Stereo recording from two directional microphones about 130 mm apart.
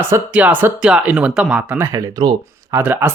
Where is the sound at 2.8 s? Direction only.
15° right (ahead or behind).